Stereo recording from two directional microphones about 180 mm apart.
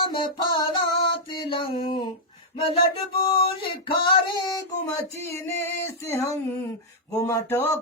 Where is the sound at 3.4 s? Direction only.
30° left (ahead or behind).